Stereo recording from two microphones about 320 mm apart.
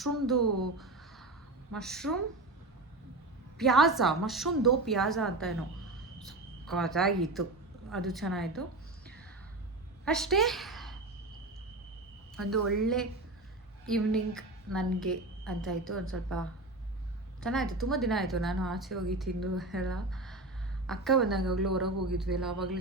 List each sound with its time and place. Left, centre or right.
0.0 s a woman's voice: centre
1.7 s a woman's voice: centre
3.6 s a woman's voice: centre
10.1 s a woman's voice: centre
12.4 s a woman's voice: right
12.8 s a woman's voice: centre
17.4 s a woman's voice: centre